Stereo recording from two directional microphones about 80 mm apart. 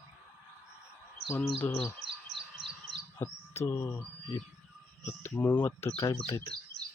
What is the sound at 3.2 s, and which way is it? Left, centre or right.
Speech, left.